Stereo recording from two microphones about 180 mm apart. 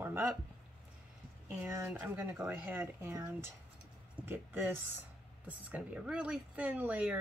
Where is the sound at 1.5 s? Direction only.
15° right (ahead or behind).